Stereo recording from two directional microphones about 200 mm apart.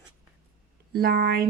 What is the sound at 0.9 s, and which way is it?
Speech, 50° right (ahead or behind).